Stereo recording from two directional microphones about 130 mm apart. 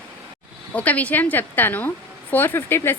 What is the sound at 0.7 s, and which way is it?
A woman's voice, 10° left (ahead or behind).